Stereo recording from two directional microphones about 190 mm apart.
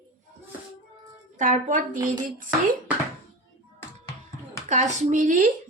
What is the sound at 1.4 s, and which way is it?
Speech, 40° right (ahead or behind).